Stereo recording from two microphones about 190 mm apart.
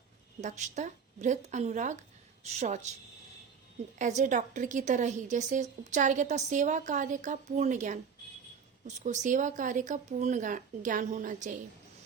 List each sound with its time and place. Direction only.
0.4 s a woman's voice: 40° right (ahead or behind)
3.9 s a woman's voice: 40° right (ahead or behind)
9.0 s a woman's voice: 40° right (ahead or behind)